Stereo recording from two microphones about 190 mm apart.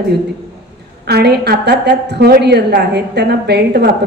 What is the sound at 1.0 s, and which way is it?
A woman's voice, 60° right (ahead or behind).